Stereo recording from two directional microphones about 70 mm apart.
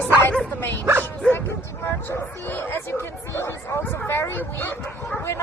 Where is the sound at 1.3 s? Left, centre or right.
Left.